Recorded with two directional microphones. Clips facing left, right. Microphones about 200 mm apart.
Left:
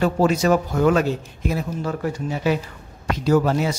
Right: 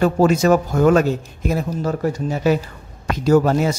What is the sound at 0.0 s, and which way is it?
A man's voice, 45° right (ahead or behind).